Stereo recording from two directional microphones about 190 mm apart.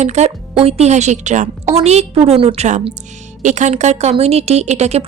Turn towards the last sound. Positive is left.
turn(degrees=-35)  # may be behind; listen again after turning